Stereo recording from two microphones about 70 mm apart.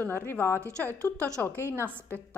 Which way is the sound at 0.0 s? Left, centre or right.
Left.